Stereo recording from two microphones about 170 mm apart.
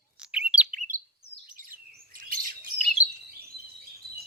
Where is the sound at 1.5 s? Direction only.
55° right (ahead or behind).